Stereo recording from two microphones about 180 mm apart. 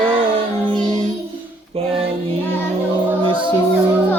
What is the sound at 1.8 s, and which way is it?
Music, 30° right (ahead or behind).